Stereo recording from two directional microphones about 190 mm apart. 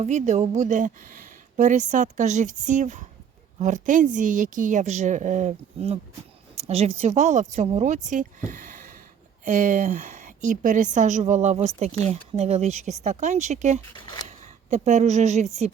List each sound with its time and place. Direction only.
0.0 s a woman's voice: 35° right (ahead or behind)